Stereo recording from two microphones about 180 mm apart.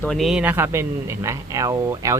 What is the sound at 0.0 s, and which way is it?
Speech, centre (ahead or behind).